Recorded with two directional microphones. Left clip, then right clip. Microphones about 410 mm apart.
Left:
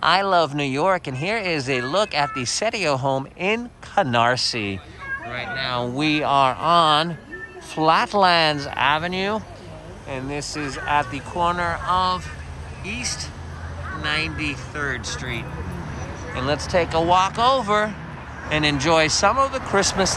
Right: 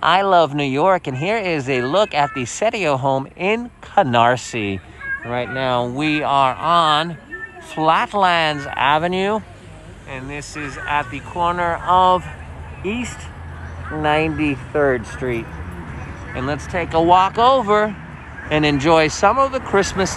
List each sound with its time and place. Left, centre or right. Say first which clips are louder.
0.0 s speech: right 4 dB; centre
14.8 s speech: right 10 dB; centre
15.0 s speech: right 5 dB; centre
16.3 s speech: left 2 dB; centre